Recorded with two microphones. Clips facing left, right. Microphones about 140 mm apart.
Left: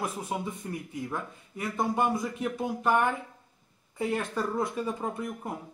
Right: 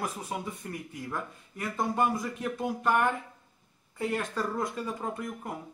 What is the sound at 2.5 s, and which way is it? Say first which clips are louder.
Speech: left 1 dB; 10° left (ahead or behind).